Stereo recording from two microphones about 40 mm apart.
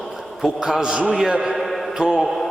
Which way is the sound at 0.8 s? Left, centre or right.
Centre.